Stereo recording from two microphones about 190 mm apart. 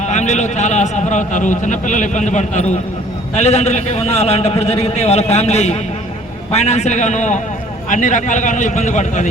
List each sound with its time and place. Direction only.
0.0 s a man's voice: 40° left (ahead or behind)